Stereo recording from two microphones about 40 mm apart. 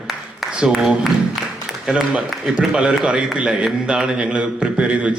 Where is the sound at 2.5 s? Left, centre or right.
Right.